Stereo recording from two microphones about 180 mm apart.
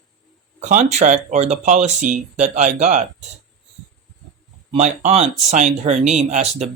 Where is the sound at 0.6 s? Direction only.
40° right (ahead or behind).